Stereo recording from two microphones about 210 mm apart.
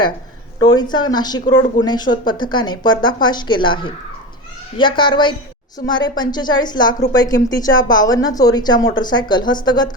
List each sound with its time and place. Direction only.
0.6 s speech: 20° left (ahead or behind)